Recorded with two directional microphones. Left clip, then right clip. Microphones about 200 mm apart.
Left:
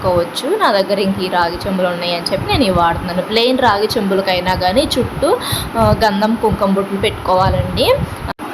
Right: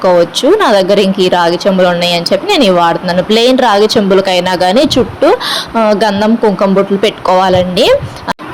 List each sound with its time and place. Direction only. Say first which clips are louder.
0.6 s speech: right 6 dB; 30° right (ahead or behind)